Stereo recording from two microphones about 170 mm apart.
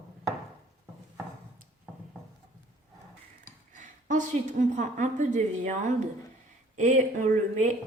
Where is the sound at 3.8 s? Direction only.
45° right (ahead or behind).